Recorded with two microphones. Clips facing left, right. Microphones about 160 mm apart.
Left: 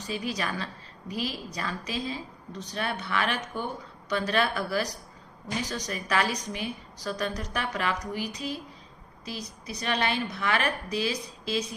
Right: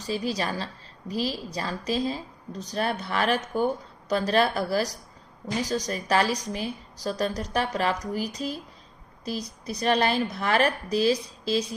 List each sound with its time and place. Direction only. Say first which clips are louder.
0.0 s a woman's voice: right 4 dB; 35° right (ahead or behind)